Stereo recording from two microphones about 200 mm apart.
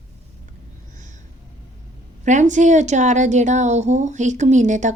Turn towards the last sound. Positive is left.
turn(degrees=-35)  # may be behind; listen again after turning